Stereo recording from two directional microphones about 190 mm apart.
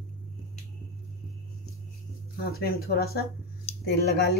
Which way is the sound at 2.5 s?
55° left (ahead or behind).